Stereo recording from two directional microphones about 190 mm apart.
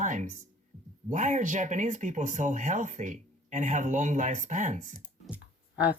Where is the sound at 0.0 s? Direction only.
40° right (ahead or behind).